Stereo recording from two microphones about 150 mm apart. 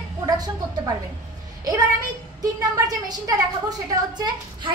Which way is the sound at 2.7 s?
25° right (ahead or behind).